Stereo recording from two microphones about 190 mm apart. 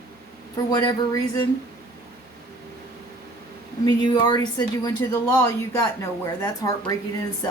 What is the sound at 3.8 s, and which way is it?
Speech, 20° left (ahead or behind).